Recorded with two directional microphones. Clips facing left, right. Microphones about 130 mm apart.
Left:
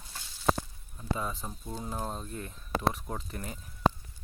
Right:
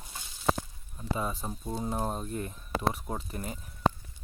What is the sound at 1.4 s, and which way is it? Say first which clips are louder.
Speech: right 5 dB; 25° right (ahead or behind).